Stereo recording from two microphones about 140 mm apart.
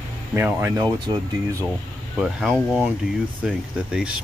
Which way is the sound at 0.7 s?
25° right (ahead or behind).